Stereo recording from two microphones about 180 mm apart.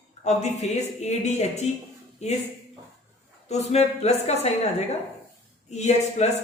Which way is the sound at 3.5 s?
35° left (ahead or behind).